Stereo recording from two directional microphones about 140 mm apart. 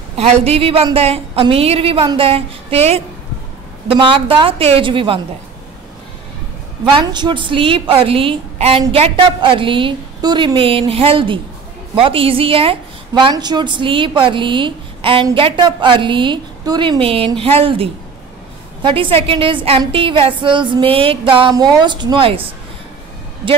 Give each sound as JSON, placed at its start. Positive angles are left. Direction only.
{"t": 0.2, "sound": "a woman's voice", "side_deg": -45}
{"t": 2.0, "sound": "music", "side_deg": -40}
{"t": 6.8, "sound": "music", "side_deg": -35}
{"t": 13.2, "sound": "music", "side_deg": -30}
{"t": 17.0, "sound": "a woman's voice", "side_deg": -40}
{"t": 18.8, "sound": "music", "side_deg": -35}